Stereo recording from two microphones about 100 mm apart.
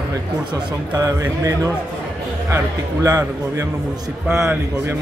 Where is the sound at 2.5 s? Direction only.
30° right (ahead or behind).